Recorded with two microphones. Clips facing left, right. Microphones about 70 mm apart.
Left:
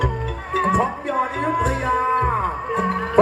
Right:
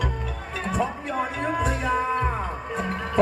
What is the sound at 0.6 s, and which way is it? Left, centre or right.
Music, left.